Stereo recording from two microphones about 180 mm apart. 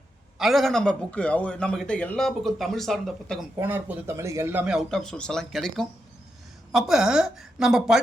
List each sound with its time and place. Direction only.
0.3 s a man's voice: centre (ahead or behind)
3.6 s a man's voice: 10° right (ahead or behind)